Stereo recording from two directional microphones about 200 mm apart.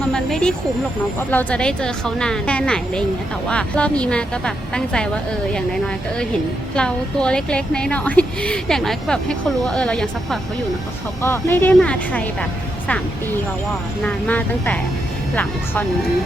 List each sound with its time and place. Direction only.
0.1 s snake: 5° left (ahead or behind)
1.3 s a woman's voice: 10° left (ahead or behind)
14.0 s speech: 10° left (ahead or behind)